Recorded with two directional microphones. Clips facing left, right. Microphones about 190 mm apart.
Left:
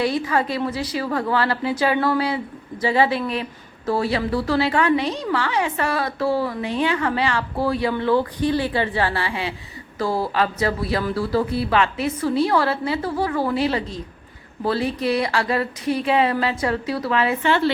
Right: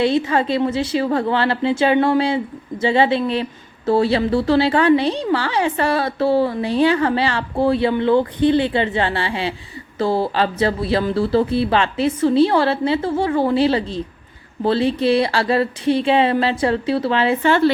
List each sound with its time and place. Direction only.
0.0 s a woman's voice: 25° right (ahead or behind)
17.4 s speech: 45° right (ahead or behind)